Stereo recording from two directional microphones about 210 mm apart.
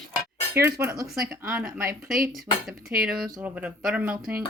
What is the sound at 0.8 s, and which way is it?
Speech, 15° right (ahead or behind).